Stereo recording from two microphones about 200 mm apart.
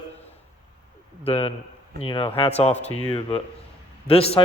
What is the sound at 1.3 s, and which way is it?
A man's voice, 30° left (ahead or behind).